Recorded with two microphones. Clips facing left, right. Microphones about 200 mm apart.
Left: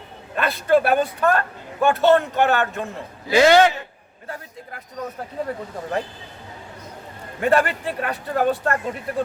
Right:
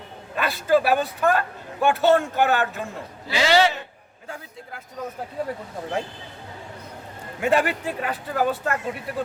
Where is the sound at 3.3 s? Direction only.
50° left (ahead or behind).